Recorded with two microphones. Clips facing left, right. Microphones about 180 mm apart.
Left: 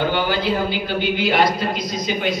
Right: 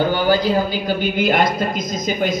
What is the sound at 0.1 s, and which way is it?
A man's voice, 40° right (ahead or behind).